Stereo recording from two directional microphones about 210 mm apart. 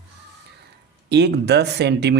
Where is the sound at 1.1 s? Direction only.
55° right (ahead or behind).